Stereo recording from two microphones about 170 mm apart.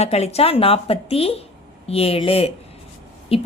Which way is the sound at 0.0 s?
40° left (ahead or behind).